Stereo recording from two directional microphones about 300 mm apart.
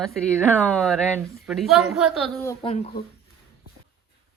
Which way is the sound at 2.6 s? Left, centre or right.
Left.